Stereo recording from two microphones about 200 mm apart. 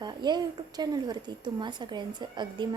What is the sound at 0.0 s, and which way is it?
A woman's voice, 20° right (ahead or behind).